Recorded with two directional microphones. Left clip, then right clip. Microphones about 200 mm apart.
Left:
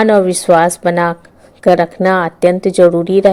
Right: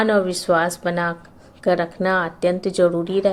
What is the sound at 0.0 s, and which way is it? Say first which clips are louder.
A woman's voice: left 8 dB; 40° left (ahead or behind).